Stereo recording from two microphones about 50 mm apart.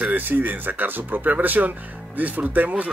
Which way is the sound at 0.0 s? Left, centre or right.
Right.